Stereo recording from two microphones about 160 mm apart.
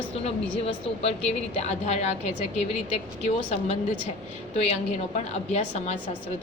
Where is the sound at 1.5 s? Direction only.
45° left (ahead or behind).